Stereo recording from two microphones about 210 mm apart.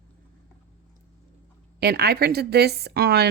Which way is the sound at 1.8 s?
50° right (ahead or behind).